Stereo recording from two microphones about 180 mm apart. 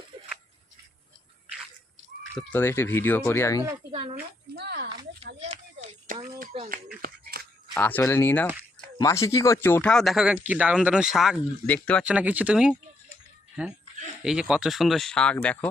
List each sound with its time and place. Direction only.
2.4 s speech: 10° left (ahead or behind)
4.5 s speech: 65° right (ahead or behind)
5.4 s a sound: 40° right (ahead or behind)
6.5 s speech: 30° right (ahead or behind)
7.0 s a sound: 60° right (ahead or behind)
7.7 s speech: 10° left (ahead or behind)
11.6 s speech: 10° left (ahead or behind)
12.0 s speech: 10° right (ahead or behind); by 15.7 s 5° left (ahead or behind)